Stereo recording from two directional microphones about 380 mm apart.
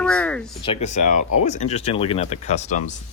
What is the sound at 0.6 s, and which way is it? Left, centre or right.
Speech, centre.